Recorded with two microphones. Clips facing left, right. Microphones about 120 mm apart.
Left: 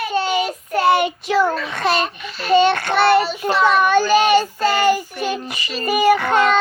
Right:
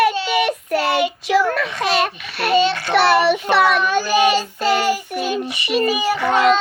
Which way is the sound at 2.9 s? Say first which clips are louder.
Right 3 dB; 70° right (ahead or behind).